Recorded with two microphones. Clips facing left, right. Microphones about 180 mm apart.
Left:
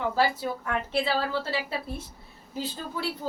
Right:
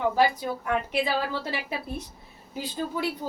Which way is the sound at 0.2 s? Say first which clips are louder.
Right 2 dB; 15° right (ahead or behind).